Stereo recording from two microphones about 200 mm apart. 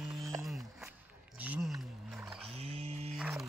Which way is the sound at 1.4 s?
5° right (ahead or behind).